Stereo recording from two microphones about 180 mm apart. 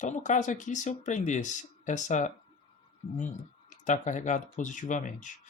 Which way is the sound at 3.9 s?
40° left (ahead or behind).